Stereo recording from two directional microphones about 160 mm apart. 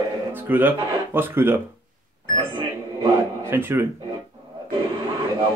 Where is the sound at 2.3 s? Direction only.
30° right (ahead or behind).